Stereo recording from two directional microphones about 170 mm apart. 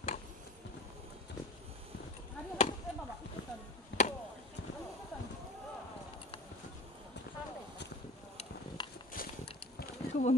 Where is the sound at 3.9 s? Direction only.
90° left.